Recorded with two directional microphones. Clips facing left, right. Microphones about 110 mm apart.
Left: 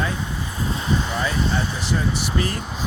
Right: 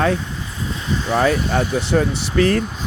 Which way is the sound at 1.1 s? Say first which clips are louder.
Right 6 dB; 60° right (ahead or behind).